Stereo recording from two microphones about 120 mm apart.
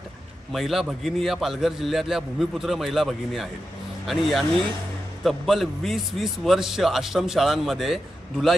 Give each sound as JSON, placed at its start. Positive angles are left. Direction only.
{"t": 0.5, "sound": "a man's voice", "side_deg": 0}